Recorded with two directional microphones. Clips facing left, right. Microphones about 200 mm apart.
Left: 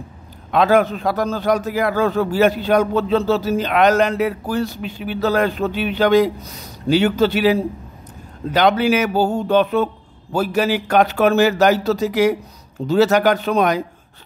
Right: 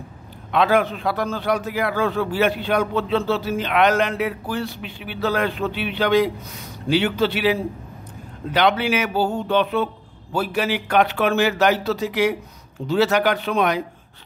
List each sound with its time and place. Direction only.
0.5 s a man's voice: 45° left (ahead or behind)